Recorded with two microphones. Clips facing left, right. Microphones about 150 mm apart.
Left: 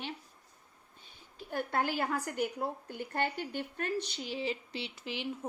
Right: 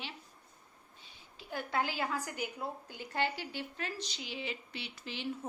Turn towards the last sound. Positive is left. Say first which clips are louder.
# left 2 dB
turn(degrees=15)  # may be behind; listen again after turning